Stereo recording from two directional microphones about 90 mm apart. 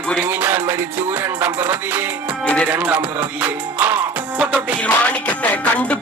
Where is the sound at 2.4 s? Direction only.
15° left (ahead or behind).